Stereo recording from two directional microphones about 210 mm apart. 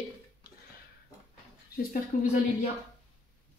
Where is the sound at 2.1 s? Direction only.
35° left (ahead or behind).